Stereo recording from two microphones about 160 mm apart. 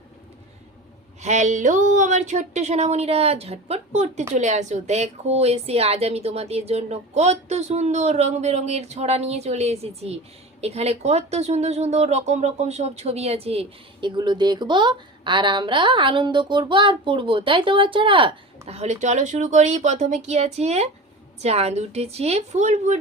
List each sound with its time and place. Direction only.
1.2 s a woman's voice: 45° right (ahead or behind)